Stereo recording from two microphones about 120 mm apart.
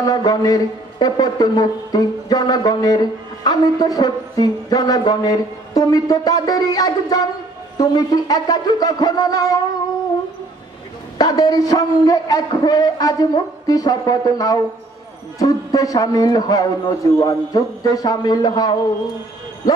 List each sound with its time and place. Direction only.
0.0 s a man's voice: 30° left (ahead or behind)
11.1 s a man's voice: 30° left (ahead or behind)